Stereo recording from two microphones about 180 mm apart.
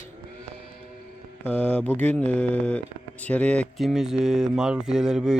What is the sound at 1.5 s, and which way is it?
Speech, 10° left (ahead or behind).